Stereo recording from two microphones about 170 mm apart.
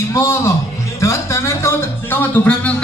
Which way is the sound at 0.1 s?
15° left (ahead or behind).